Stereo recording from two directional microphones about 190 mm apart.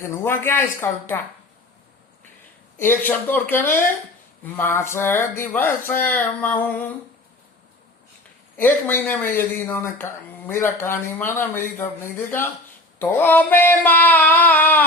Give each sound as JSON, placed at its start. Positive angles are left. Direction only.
{"t": 0.0, "sound": "speech", "side_deg": 15}
{"t": 2.7, "sound": "speech", "side_deg": 10}
{"t": 8.5, "sound": "speech", "side_deg": 10}
{"t": 13.0, "sound": "speech", "side_deg": 10}